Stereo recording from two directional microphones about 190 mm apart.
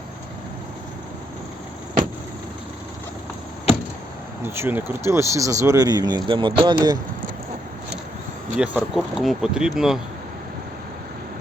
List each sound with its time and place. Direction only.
4.4 s speech: 10° right (ahead or behind)
8.5 s speech: 5° right (ahead or behind)